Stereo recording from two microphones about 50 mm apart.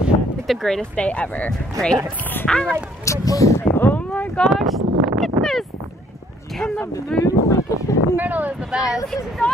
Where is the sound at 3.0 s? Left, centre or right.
Left.